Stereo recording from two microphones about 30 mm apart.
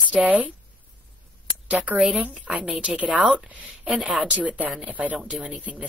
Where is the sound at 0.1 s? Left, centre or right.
Right.